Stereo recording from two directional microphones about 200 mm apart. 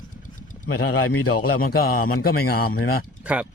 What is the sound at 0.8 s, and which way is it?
Speech, 90° left.